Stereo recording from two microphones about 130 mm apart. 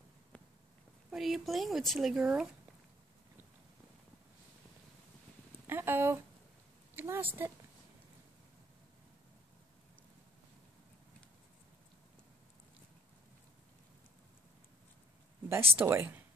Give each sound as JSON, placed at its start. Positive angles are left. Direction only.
{"t": 1.1, "sound": "speech", "side_deg": 0}
{"t": 5.7, "sound": "a woman's voice", "side_deg": -15}
{"t": 15.7, "sound": "a woman's voice", "side_deg": -15}